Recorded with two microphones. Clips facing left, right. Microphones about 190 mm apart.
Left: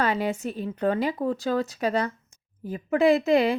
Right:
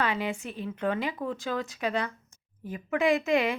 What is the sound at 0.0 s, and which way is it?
A woman's voice, 40° left (ahead or behind).